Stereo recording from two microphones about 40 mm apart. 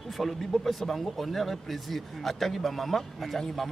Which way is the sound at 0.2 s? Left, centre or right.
Centre.